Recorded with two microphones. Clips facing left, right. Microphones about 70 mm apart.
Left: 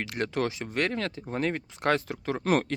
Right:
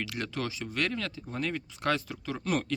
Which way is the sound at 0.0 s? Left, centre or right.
Left.